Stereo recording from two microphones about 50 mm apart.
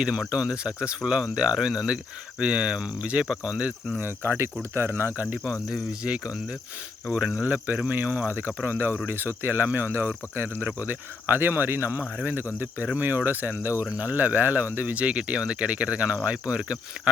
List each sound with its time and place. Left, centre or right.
0.0 s speech: centre
4.0 s speech: right
5.7 s speech: centre
7.4 s speech: right
15.0 s speech: right